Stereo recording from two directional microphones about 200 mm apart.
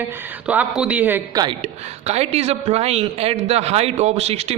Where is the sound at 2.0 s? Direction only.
30° right (ahead or behind).